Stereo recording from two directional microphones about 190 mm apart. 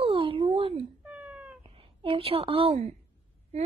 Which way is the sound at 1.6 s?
30° right (ahead or behind).